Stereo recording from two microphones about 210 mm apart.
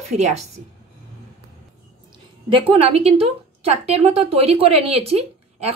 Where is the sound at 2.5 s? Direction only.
30° right (ahead or behind).